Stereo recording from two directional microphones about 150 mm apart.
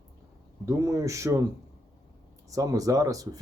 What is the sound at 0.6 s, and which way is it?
Speech, 20° right (ahead or behind).